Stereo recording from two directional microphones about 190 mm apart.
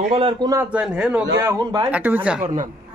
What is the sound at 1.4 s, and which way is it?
A man's voice, 20° right (ahead or behind).